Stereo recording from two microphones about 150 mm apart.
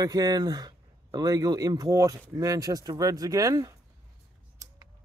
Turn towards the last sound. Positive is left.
turn(degrees=-20)  # may be behind; listen again after turning